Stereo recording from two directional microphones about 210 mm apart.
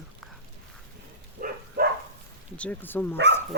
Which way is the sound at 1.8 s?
50° right (ahead or behind).